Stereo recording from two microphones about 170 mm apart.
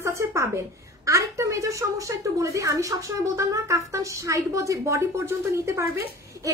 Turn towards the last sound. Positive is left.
turn(degrees=-15)  # may be behind; listen again after turning